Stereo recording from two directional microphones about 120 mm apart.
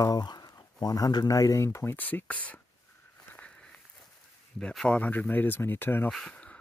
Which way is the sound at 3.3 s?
10° left (ahead or behind).